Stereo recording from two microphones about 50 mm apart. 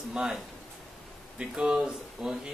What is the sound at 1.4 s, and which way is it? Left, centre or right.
Speech, centre.